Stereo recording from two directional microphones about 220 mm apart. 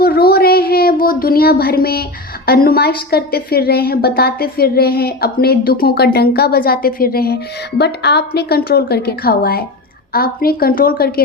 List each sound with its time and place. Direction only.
0.0 s child singing: 45° left (ahead or behind)
1.0 s a woman's voice: 40° left (ahead or behind)